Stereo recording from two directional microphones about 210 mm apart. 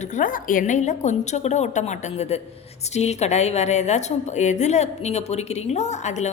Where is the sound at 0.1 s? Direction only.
40° left (ahead or behind).